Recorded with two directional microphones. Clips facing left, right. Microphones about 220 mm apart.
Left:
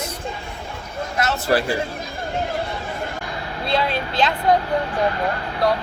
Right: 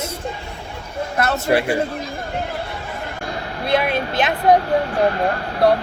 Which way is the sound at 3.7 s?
20° right (ahead or behind).